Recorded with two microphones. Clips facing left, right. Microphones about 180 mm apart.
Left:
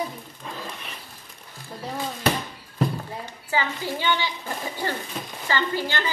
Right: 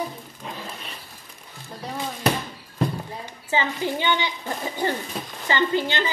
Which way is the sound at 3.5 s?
20° right (ahead or behind).